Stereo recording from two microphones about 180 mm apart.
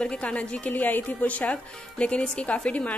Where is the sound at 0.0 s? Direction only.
5° left (ahead or behind).